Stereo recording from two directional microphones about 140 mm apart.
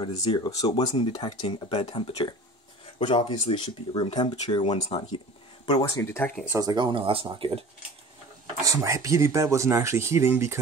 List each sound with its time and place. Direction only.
0.0 s speech: 35° left (ahead or behind)
5.9 s speech: 15° left (ahead or behind)
6.5 s speech: 30° right (ahead or behind)
8.6 s speech: 25° right (ahead or behind)